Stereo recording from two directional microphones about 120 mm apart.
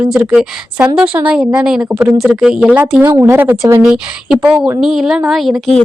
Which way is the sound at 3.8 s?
5° right (ahead or behind).